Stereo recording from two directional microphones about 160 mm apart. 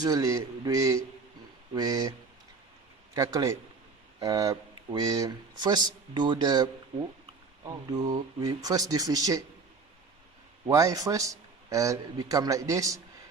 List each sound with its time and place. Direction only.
0.0 s speech: 20° right (ahead or behind)
3.2 s speech: 20° right (ahead or behind)
10.7 s speech: 20° right (ahead or behind)